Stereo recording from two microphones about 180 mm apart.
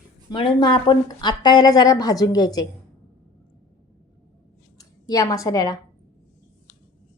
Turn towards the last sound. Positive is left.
turn(degrees=20)  # may be behind; listen again after turning